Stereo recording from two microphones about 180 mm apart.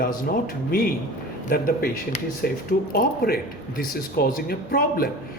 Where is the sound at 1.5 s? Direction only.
55° left (ahead or behind).